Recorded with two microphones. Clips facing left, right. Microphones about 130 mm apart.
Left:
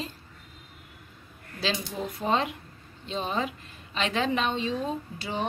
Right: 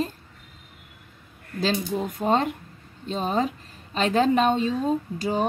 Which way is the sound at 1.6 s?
45° right (ahead or behind).